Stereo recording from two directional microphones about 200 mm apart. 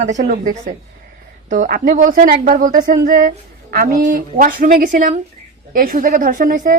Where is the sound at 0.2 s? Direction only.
45° right (ahead or behind).